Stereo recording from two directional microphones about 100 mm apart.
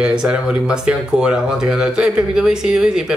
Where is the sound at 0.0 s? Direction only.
10° right (ahead or behind).